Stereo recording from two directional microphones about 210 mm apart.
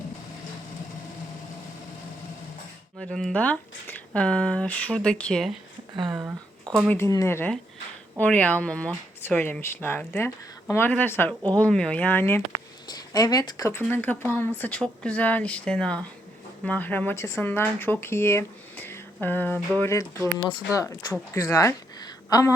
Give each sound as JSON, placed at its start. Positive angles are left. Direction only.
{"t": 3.0, "sound": "speech", "side_deg": 5}
{"t": 6.1, "sound": "speech", "side_deg": -20}
{"t": 6.7, "sound": "speech", "side_deg": 10}
{"t": 20.1, "sound": "speech", "side_deg": -15}
{"t": 20.7, "sound": "speech", "side_deg": 15}